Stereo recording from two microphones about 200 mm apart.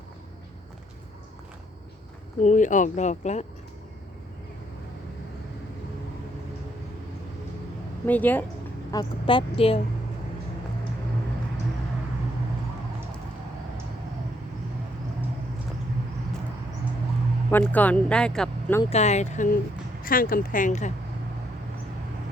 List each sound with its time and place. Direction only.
2.4 s speech: 40° left (ahead or behind)
8.0 s speech: 10° left (ahead or behind)
8.9 s speech: 20° left (ahead or behind)
17.5 s speech: 10° left (ahead or behind)
18.9 s speech: 35° left (ahead or behind)